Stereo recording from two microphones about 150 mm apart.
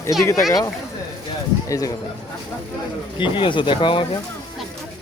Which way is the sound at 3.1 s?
35° left (ahead or behind).